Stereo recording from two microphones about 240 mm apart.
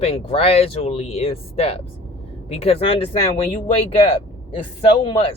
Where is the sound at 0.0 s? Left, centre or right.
Left.